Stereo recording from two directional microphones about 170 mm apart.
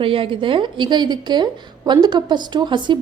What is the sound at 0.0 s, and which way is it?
A woman's voice, 30° right (ahead or behind).